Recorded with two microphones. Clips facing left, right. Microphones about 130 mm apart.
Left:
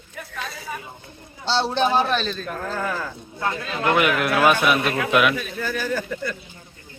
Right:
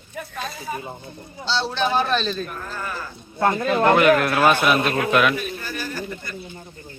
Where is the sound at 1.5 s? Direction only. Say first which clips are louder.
Left 3 dB; 55° left (ahead or behind).